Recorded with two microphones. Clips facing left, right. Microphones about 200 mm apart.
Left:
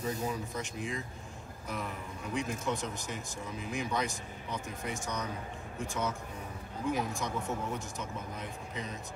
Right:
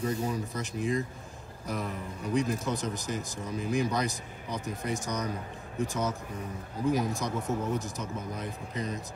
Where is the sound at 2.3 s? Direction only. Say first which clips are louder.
Right 5 dB; 35° right (ahead or behind).